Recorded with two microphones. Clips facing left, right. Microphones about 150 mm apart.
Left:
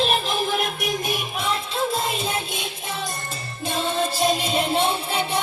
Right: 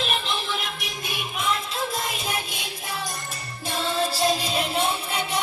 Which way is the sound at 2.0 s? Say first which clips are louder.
Left 4 dB; 25° left (ahead or behind).